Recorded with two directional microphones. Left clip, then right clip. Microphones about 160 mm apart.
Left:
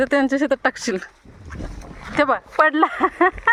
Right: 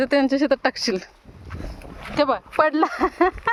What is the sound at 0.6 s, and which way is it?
Speech, 5° right (ahead or behind).